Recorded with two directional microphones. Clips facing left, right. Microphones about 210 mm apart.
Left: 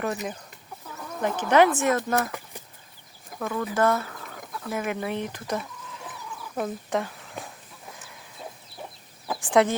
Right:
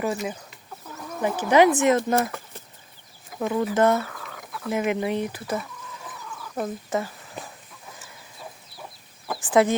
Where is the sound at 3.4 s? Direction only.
20° right (ahead or behind); by 6.0 s 5° right (ahead or behind).